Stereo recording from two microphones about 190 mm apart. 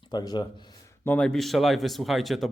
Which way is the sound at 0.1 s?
20° left (ahead or behind).